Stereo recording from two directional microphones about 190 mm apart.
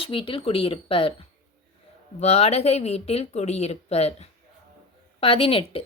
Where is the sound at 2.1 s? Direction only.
35° left (ahead or behind).